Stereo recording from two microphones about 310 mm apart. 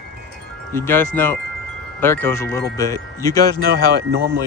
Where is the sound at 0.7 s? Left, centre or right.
Centre.